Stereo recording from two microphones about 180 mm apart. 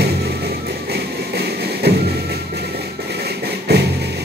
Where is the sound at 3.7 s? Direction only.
65° right (ahead or behind).